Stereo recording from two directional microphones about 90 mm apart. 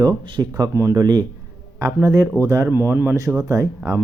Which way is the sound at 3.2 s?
40° right (ahead or behind).